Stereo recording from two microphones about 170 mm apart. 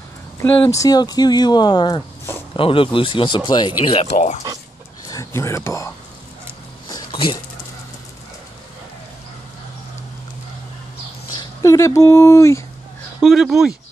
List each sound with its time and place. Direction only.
0.4 s speech: 20° left (ahead or behind)
4.0 s speech: 40° left (ahead or behind)
5.0 s speech: 20° left (ahead or behind)
6.9 s a sound: 25° left (ahead or behind)
11.3 s speech: 20° left (ahead or behind)
13.2 s speech: centre (ahead or behind)